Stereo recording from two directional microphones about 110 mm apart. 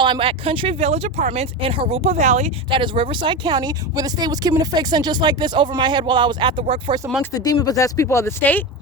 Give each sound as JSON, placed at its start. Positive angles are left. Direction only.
{"t": 0.0, "sound": "speech", "side_deg": -50}
{"t": 2.6, "sound": "speech", "side_deg": -50}
{"t": 7.3, "sound": "speech", "side_deg": 35}